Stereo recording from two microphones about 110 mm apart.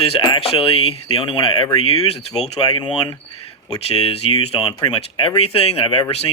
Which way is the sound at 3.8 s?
65° left (ahead or behind).